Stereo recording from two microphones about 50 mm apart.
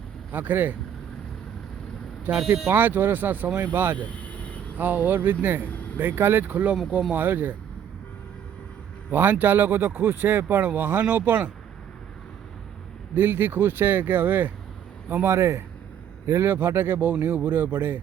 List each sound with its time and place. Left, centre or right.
0.3 s speech: right
2.3 s speech: right
3.9 s vehicle: left
4.8 s speech: right
6.5 s speech: right
9.0 s a man's voice: right
13.1 s speech: right
15.3 s a man's voice: right
16.4 s speech: right